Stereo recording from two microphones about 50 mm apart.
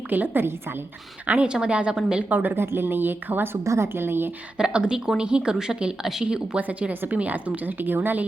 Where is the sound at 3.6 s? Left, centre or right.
Right.